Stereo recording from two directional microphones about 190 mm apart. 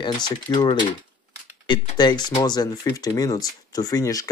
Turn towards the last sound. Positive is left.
turn(degrees=20)  # may be behind; listen again after turning